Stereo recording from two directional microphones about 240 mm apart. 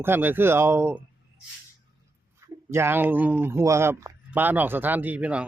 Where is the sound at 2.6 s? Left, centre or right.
Centre.